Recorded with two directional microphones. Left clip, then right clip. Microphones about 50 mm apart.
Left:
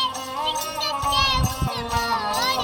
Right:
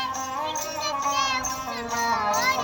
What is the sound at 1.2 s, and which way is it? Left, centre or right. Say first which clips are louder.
Music: left 6 dB; left.